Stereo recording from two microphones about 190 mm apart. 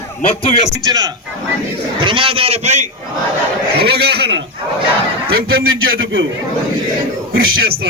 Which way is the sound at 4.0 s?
60° right (ahead or behind).